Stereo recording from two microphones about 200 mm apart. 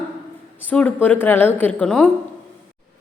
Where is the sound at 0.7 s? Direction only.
5° left (ahead or behind).